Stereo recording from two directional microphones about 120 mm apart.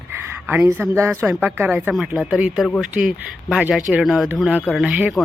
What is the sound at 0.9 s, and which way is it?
A woman's voice, 20° right (ahead or behind).